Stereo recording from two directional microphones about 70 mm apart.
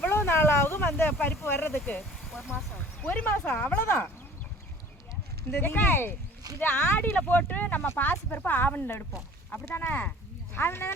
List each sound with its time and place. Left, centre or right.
0.0 s a sound: left
1.4 s speech: left
2.2 s vehicle: centre
3.0 s speech: left
5.5 s speech: left